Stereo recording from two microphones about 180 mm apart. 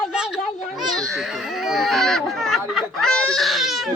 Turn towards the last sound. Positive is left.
turn(degrees=0)  # may be behind; listen again after turning